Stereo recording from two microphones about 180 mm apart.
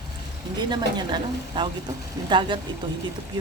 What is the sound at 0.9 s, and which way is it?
A woman's voice, 25° right (ahead or behind).